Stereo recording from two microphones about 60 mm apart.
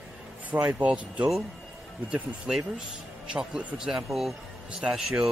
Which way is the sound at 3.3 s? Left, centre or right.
Right.